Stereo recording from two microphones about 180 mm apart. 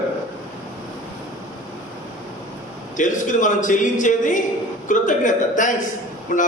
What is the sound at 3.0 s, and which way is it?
A man's voice, 45° left (ahead or behind).